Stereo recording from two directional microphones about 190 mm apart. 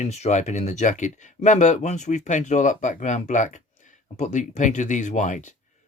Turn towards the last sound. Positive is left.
turn(degrees=40)  # may be behind; listen again after turning